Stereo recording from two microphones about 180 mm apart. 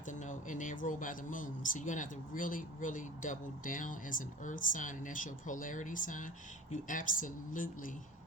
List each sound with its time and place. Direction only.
0.1 s speech: 45° left (ahead or behind)